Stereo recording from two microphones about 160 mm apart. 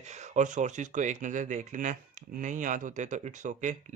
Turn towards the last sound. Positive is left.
turn(degrees=-50)  # may be behind; listen again after turning